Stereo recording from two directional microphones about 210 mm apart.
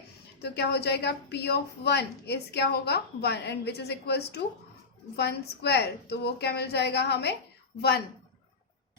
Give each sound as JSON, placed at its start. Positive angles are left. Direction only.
{"t": 0.4, "sound": "a woman's voice", "side_deg": 55}